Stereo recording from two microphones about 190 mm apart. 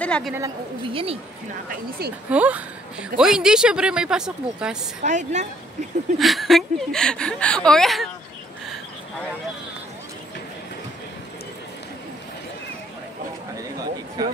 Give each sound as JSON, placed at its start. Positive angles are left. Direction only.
{"t": 0.0, "sound": "a woman's voice", "side_deg": 5}
{"t": 0.4, "sound": "a woman's voice", "side_deg": -30}
{"t": 2.2, "sound": "a woman's voice", "side_deg": -10}
{"t": 5.0, "sound": "speech", "side_deg": -40}
{"t": 6.1, "sound": "a woman's voice", "side_deg": 0}
{"t": 14.2, "sound": "a woman's voice", "side_deg": -20}